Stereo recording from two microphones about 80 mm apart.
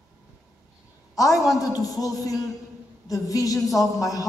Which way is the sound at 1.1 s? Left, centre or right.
Left.